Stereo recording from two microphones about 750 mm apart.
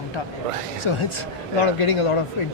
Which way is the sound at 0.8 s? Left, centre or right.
Left.